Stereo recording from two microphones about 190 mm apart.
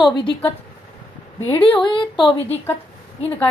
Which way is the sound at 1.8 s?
25° left (ahead or behind).